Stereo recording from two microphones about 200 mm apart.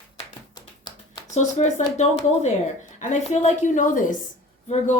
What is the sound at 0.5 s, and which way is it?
Tap, 20° left (ahead or behind).